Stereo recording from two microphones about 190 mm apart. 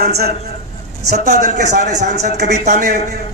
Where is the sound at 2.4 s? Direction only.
55° right (ahead or behind).